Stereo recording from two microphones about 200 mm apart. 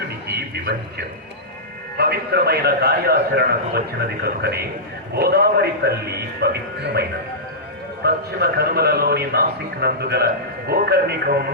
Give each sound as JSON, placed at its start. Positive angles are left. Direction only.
{"t": 0.3, "sound": "a sound", "side_deg": -50}
{"t": 2.0, "sound": "a man's voice", "side_deg": -50}
{"t": 8.0, "sound": "a man's voice", "side_deg": -50}